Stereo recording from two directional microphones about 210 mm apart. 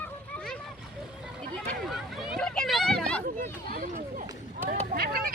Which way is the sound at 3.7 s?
40° right (ahead or behind).